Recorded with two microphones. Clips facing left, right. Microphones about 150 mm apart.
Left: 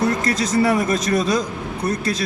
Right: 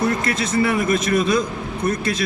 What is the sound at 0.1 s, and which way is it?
A man's voice, 35° left (ahead or behind).